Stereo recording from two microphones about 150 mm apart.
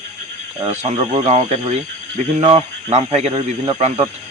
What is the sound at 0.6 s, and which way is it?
Speech, 45° right (ahead or behind).